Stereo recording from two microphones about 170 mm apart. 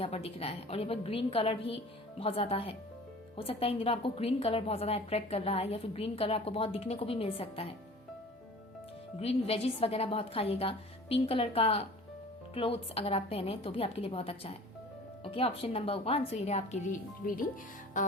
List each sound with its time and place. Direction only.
0.0 s a woman's voice: 35° left (ahead or behind)
9.2 s a woman's voice: 35° left (ahead or behind); by 17.4 s 50° left (ahead or behind)
18.0 s music: 50° left (ahead or behind)